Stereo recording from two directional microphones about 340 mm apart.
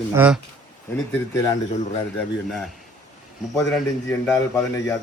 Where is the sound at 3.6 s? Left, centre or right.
Centre.